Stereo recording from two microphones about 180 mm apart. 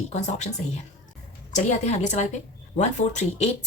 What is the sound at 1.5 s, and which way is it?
Speech, 40° left (ahead or behind).